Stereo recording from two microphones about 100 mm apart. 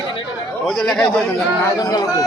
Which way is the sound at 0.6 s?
Centre (ahead or behind).